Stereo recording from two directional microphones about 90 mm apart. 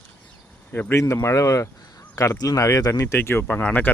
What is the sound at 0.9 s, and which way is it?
Speech, 30° left (ahead or behind).